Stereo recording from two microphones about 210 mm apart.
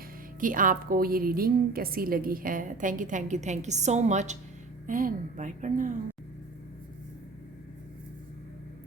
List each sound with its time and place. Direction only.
0.3 s a woman's voice: 40° right (ahead or behind)